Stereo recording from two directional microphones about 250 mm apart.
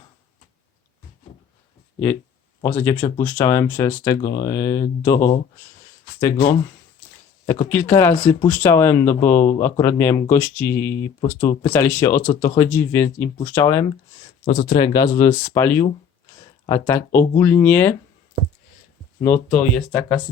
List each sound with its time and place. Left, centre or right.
2.6 s speech: centre
4.2 s speech: left
4.4 s speech: centre
19.2 s speech: centre